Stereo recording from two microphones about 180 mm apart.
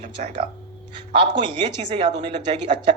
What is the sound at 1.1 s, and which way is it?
Speech, 30° right (ahead or behind).